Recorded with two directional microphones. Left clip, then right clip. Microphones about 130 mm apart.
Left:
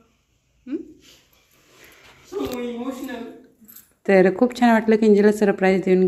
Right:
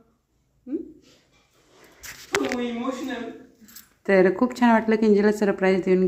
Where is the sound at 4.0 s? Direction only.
20° left (ahead or behind).